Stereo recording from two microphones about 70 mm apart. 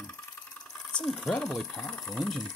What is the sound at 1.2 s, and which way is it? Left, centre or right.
Speech, centre.